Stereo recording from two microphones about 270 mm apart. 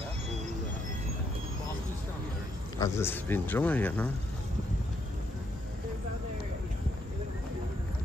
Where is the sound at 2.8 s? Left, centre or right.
Centre.